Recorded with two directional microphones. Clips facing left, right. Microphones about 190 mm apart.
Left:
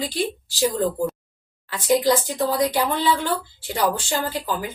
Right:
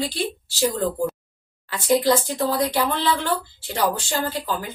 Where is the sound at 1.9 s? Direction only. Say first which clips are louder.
Even; 15° left (ahead or behind).